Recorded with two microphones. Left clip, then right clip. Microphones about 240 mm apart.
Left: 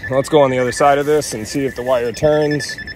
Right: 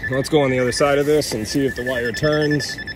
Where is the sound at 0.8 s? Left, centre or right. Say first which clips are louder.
Left 4 dB; left.